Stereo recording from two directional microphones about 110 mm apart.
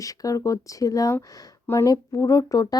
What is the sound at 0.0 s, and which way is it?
Speech, 30° left (ahead or behind).